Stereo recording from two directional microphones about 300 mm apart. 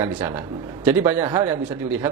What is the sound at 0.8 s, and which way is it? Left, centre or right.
Speech, centre.